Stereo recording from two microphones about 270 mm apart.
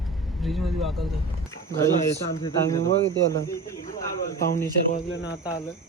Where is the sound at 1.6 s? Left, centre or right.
Centre.